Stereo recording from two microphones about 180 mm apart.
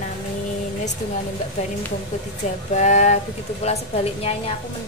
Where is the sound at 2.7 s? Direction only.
40° left (ahead or behind).